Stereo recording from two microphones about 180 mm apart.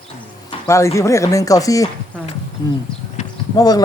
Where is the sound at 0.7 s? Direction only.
15° left (ahead or behind).